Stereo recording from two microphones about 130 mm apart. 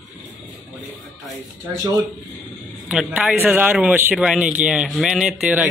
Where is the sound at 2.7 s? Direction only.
5° right (ahead or behind).